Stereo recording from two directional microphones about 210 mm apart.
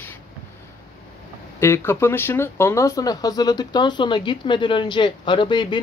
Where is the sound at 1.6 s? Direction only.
10° left (ahead or behind).